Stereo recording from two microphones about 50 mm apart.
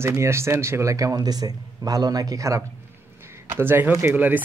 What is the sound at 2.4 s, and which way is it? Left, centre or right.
Speech, right.